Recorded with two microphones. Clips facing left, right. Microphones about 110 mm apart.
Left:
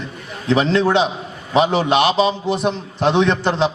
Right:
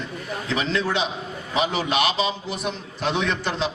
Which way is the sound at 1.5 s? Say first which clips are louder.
Left 8 dB; 30° left (ahead or behind).